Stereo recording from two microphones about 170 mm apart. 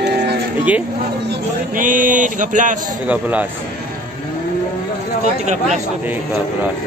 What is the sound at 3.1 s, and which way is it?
Speech, 10° right (ahead or behind).